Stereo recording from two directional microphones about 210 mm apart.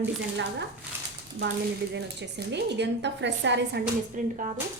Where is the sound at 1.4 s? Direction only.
45° right (ahead or behind).